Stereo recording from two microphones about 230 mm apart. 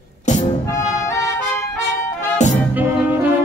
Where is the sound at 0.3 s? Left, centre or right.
Left.